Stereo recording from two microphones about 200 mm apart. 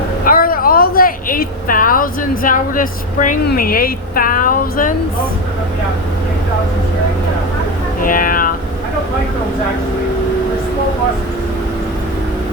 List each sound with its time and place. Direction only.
0.3 s speech: 45° left (ahead or behind)
8.0 s speech: 45° left (ahead or behind)